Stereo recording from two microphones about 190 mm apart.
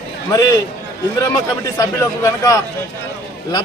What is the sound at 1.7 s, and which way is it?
Speech, 15° left (ahead or behind).